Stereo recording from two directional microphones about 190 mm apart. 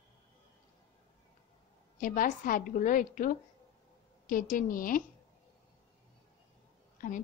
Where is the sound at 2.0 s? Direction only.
45° left (ahead or behind).